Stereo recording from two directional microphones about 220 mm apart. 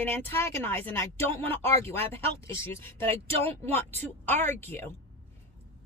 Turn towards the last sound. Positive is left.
turn(degrees=10)  # may be behind; listen again after turning